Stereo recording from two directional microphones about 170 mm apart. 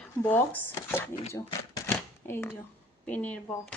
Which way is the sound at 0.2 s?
10° left (ahead or behind).